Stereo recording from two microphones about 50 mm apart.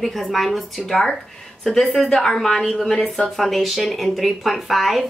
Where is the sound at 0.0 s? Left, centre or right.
Centre.